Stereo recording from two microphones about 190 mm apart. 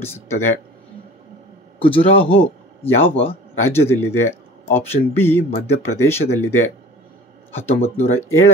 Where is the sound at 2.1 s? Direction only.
30° left (ahead or behind).